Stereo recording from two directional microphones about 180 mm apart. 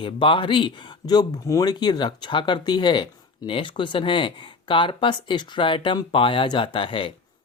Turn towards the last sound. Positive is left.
turn(degrees=30)  # may be behind; listen again after turning